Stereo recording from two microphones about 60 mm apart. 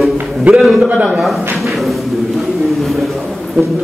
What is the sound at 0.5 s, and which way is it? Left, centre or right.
Speech, centre.